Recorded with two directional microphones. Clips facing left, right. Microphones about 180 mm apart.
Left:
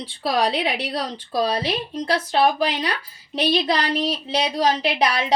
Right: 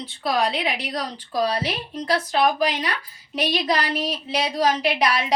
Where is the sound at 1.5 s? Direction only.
20° left (ahead or behind).